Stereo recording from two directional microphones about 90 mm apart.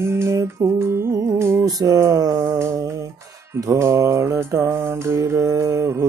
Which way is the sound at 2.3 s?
30° right (ahead or behind).